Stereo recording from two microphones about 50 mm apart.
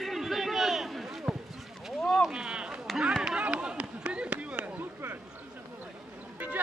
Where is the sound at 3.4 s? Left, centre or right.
Right.